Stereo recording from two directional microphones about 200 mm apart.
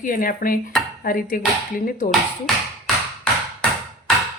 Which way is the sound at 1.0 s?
45° left (ahead or behind).